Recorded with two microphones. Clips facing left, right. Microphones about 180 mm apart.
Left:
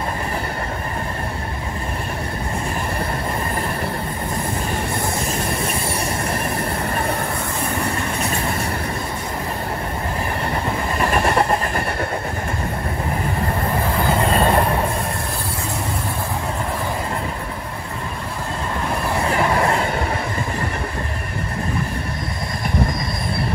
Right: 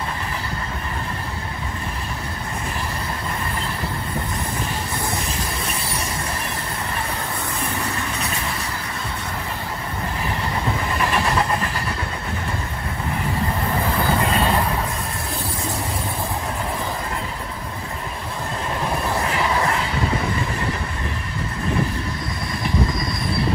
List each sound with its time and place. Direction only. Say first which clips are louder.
11.0 s vehicle: left 4 dB; 50° left (ahead or behind)
19.3 s vehicle: left 6 dB; 50° left (ahead or behind)